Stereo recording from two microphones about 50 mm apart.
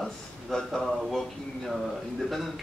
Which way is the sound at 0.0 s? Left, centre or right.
Centre.